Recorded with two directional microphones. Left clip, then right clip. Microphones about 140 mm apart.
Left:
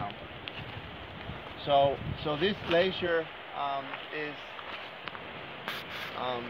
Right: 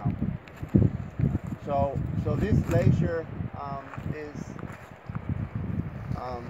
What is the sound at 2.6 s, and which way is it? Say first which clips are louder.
Speech: left 3 dB; 50° right (ahead or behind).